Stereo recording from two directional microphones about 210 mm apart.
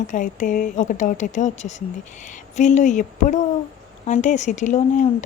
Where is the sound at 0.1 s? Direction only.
40° left (ahead or behind).